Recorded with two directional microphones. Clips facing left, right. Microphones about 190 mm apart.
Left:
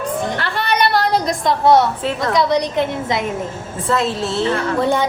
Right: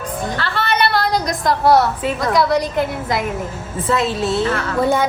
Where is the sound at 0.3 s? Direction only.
15° left (ahead or behind).